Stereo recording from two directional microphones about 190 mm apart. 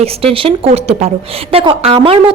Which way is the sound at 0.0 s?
30° right (ahead or behind).